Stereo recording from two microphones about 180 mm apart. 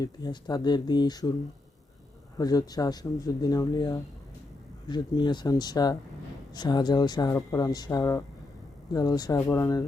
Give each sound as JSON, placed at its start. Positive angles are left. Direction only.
{"t": 0.0, "sound": "speech", "side_deg": 25}
{"t": 2.4, "sound": "speech", "side_deg": 20}